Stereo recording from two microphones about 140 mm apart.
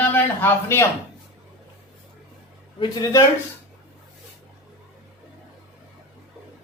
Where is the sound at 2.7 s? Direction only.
35° left (ahead or behind).